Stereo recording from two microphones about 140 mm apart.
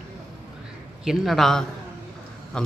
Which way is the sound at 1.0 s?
5° right (ahead or behind).